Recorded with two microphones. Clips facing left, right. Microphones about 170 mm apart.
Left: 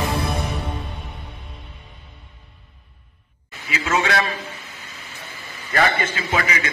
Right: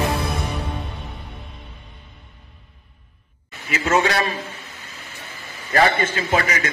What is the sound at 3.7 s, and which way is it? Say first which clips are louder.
Speech: right 3 dB; 50° right (ahead or behind).